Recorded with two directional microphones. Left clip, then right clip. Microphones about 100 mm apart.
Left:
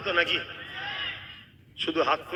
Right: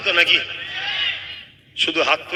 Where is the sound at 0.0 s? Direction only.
15° right (ahead or behind).